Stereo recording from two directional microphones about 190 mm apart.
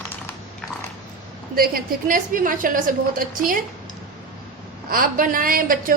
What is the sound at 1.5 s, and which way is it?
Speech, 50° right (ahead or behind).